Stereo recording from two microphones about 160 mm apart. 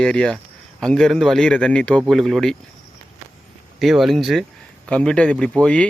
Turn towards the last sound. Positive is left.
turn(degrees=5)  # may be behind; listen again after turning